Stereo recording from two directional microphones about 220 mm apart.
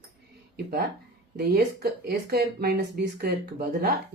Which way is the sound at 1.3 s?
45° right (ahead or behind).